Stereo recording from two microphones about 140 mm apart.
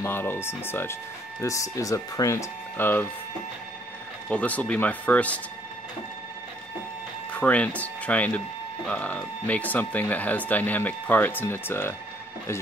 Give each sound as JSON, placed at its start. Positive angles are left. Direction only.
{"t": 0.0, "sound": "speech", "side_deg": 15}
{"t": 4.3, "sound": "speech", "side_deg": 10}
{"t": 7.3, "sound": "speech", "side_deg": 10}